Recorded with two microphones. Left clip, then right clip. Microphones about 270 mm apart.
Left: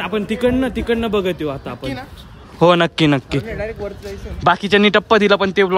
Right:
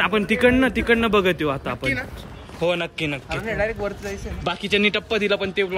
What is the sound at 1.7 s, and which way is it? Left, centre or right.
Speech, centre.